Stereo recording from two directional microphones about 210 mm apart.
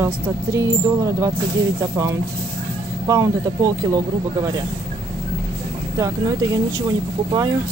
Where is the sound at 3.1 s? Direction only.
15° right (ahead or behind).